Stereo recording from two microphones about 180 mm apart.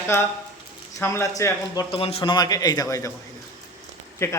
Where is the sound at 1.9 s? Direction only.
30° left (ahead or behind).